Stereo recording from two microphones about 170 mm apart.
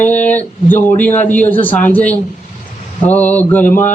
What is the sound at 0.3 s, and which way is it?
A man's voice, 10° left (ahead or behind).